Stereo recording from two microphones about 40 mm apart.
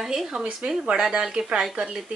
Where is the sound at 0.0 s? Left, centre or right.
Centre.